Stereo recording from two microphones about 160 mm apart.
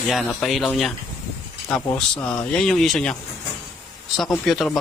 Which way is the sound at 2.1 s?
15° left (ahead or behind).